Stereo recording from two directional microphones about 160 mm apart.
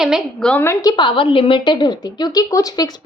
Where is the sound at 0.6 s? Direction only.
20° left (ahead or behind).